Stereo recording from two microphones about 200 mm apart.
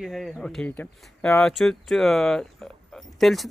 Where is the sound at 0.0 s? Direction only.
Centre (ahead or behind).